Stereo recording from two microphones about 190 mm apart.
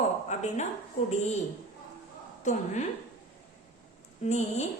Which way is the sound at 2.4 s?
40° left (ahead or behind).